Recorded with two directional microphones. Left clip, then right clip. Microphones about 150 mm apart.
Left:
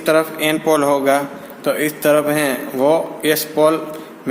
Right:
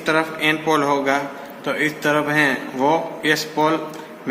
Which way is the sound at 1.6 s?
90° left.